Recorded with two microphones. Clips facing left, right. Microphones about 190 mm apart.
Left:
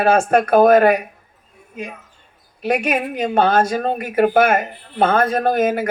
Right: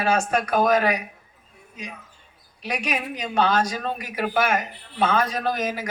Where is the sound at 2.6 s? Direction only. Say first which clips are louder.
Left 9 dB; 55° left (ahead or behind).